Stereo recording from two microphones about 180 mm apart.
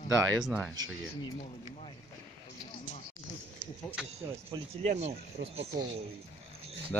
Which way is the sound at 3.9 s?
5° right (ahead or behind).